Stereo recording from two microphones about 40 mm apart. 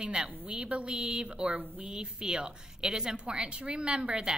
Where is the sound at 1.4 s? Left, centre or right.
Right.